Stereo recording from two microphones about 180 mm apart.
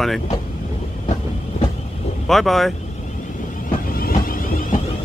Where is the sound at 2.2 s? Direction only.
Centre (ahead or behind).